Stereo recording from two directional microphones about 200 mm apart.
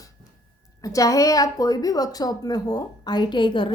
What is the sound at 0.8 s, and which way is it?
A woman's voice, 15° left (ahead or behind).